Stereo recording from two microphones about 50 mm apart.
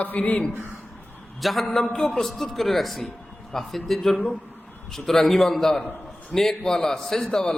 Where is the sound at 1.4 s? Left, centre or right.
Centre.